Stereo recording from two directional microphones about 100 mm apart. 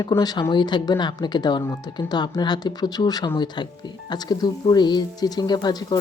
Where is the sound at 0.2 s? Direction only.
45° left (ahead or behind).